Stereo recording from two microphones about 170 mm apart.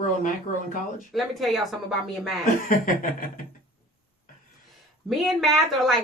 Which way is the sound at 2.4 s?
55° left (ahead or behind).